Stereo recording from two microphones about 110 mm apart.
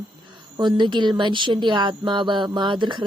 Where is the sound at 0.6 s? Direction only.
45° right (ahead or behind).